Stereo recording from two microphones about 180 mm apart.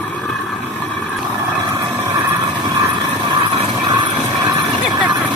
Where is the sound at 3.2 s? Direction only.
25° right (ahead or behind).